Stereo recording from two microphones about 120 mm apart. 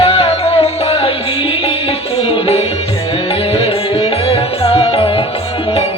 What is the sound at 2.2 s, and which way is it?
Music, 55° left (ahead or behind).